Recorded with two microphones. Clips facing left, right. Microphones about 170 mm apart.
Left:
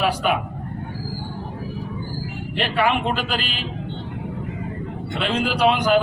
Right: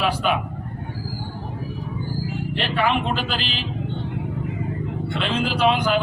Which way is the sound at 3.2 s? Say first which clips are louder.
Left 1 dB; 50° left (ahead or behind).